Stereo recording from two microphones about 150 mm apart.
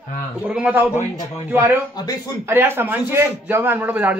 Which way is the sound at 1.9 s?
25° left (ahead or behind).